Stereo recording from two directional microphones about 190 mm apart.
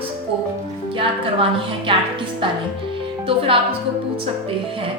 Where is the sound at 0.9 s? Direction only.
30° right (ahead or behind).